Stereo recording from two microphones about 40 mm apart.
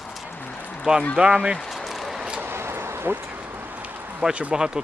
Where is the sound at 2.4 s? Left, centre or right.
Right.